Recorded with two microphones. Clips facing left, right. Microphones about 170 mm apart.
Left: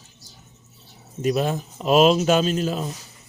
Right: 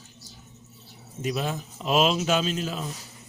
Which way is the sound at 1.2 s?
45° left (ahead or behind).